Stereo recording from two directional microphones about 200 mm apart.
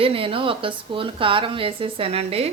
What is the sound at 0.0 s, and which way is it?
Speech, 25° right (ahead or behind).